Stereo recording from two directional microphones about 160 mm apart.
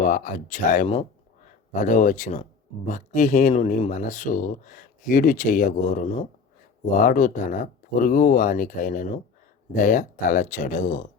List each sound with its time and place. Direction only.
0.0 s speech: 55° left (ahead or behind)